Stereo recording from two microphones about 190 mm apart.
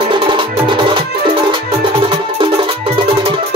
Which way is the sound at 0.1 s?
25° right (ahead or behind).